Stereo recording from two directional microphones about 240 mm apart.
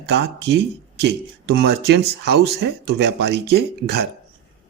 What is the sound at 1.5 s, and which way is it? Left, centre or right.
Speech, right.